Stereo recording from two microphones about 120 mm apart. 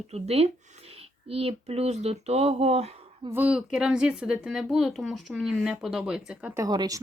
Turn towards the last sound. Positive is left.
turn(degrees=-30)  # may be behind; listen again after turning